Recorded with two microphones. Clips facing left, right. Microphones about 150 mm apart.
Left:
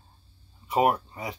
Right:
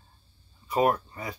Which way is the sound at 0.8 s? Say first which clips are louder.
Even; 15° left (ahead or behind).